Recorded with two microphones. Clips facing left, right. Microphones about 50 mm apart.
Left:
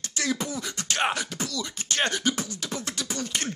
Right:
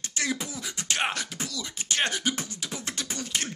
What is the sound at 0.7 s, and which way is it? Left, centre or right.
Beatboxing, centre.